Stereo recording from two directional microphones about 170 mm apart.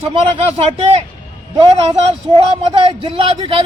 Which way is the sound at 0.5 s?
35° right (ahead or behind).